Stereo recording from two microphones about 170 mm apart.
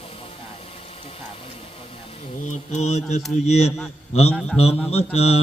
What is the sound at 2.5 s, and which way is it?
A man's voice, 40° left (ahead or behind).